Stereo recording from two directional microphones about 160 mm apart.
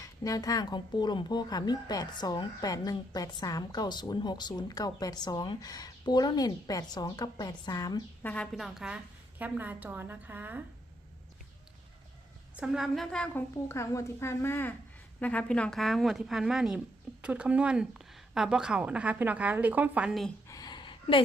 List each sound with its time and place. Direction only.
0.0 s speech: 20° left (ahead or behind)
8.2 s a woman's voice: 5° left (ahead or behind); by 10.6 s 10° right (ahead or behind)
12.5 s a woman's voice: 5° right (ahead or behind)
13.7 s a woman's voice: 20° left (ahead or behind); by 20.3 s centre (ahead or behind)
20.5 s a sound: 25° left (ahead or behind)